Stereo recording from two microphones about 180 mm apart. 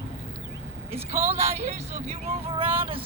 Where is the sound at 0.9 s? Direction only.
35° right (ahead or behind).